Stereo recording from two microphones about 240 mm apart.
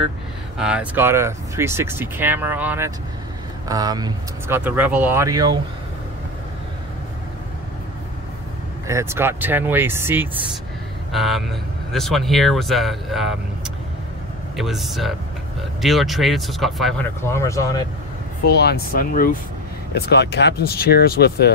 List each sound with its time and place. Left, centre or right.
0.6 s speech: centre
8.8 s speech: centre
14.6 s speech: centre
17.2 s speech: centre
18.4 s speech: left